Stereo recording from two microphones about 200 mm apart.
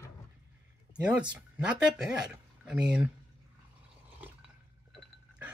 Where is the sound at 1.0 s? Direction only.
5° right (ahead or behind).